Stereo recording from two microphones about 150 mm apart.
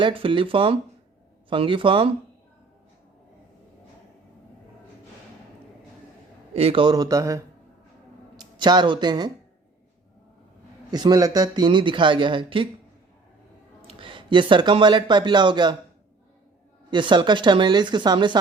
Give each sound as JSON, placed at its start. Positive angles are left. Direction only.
{"t": 0.0, "sound": "speech", "side_deg": -35}
{"t": 6.5, "sound": "a man's voice", "side_deg": -40}
{"t": 10.9, "sound": "speech", "side_deg": -25}
{"t": 13.8, "sound": "speech", "side_deg": -35}
{"t": 16.9, "sound": "speech", "side_deg": -30}